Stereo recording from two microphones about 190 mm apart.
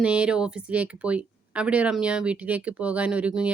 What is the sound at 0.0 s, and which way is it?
Speech, 5° right (ahead or behind).